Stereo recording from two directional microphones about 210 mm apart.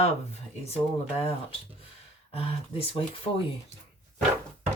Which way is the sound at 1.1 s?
30° left (ahead or behind).